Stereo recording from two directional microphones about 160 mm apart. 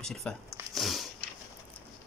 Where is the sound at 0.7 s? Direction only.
Centre (ahead or behind).